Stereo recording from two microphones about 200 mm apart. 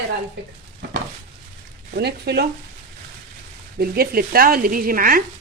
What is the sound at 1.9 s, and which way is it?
Speech, 55° right (ahead or behind).